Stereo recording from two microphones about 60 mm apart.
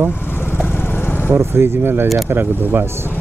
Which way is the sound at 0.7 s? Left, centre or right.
Left.